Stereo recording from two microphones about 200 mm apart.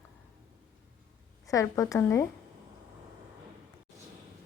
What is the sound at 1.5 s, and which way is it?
Speech, 15° left (ahead or behind).